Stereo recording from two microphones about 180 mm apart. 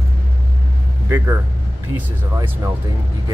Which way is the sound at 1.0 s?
15° right (ahead or behind).